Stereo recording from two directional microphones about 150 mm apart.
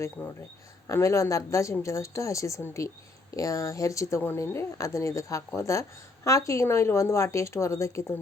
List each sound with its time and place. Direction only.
0.2 s speech: 15° left (ahead or behind)